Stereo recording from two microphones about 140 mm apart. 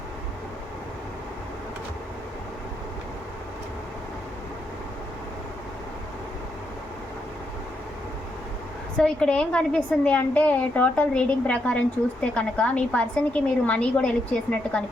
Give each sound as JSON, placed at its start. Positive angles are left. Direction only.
{"t": 9.0, "sound": "a woman's voice", "side_deg": 5}